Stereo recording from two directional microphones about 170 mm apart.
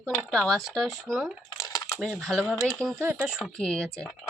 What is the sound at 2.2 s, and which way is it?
Speech, centre (ahead or behind).